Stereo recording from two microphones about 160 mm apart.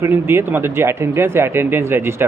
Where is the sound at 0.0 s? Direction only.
15° right (ahead or behind).